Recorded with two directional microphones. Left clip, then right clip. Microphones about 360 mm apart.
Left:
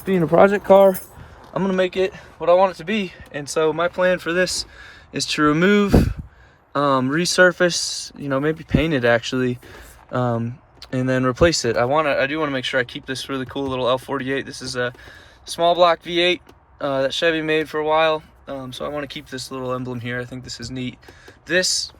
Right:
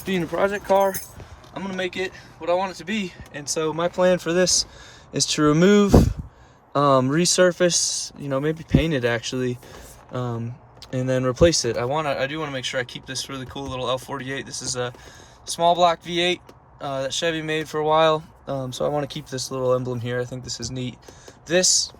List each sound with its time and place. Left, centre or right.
0.0 s speech: centre
0.3 s speech: centre
1.5 s speech: centre